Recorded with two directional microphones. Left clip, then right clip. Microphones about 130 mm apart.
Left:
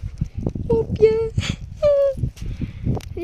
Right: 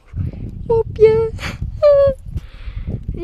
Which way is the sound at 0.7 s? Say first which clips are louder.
Right 5 dB; 45° right (ahead or behind).